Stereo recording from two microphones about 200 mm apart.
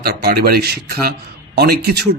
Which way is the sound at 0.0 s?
50° right (ahead or behind).